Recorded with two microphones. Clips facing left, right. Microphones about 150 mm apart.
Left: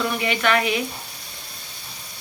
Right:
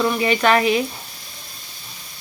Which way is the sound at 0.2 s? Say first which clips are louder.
Right 4 dB; 35° right (ahead or behind).